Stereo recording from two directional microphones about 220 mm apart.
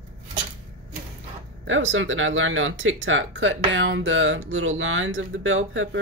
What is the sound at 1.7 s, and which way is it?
Speech, 60° right (ahead or behind).